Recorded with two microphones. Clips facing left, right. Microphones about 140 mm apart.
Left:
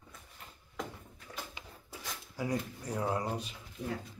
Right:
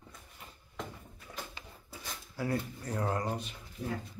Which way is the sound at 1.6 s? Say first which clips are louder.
Even; 15° left (ahead or behind).